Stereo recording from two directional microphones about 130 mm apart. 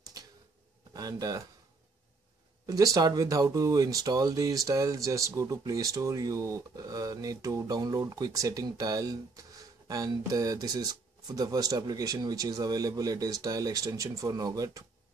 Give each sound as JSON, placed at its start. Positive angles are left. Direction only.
{"t": 0.9, "sound": "speech", "side_deg": -25}
{"t": 2.6, "sound": "speech", "side_deg": -25}